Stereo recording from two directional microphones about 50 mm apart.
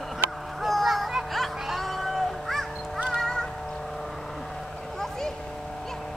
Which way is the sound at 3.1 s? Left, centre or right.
Centre.